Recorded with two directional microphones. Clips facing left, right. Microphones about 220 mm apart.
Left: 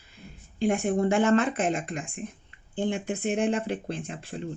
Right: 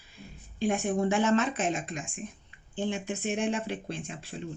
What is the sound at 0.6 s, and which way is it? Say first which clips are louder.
Speech: left 3 dB; 55° left (ahead or behind).